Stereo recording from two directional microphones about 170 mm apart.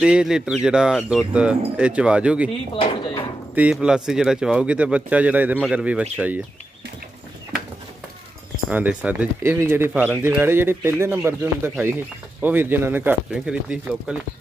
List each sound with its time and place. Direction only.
0.0 s speech: 5° right (ahead or behind)
2.7 s speech: 30° left (ahead or behind)
3.5 s speech: 5° right (ahead or behind)
8.6 s speech: 10° right (ahead or behind)